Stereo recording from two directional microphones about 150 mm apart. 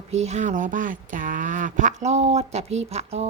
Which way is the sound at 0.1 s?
45° right (ahead or behind).